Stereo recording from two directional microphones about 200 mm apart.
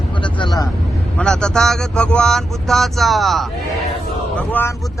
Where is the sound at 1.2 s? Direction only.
5° left (ahead or behind).